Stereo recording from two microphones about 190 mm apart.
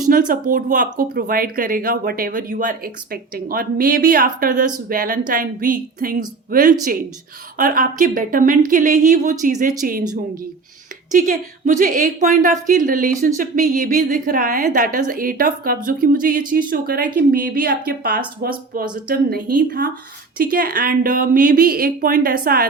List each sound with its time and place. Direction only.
0.0 s speech: 45° right (ahead or behind)
11.1 s speech: 45° right (ahead or behind)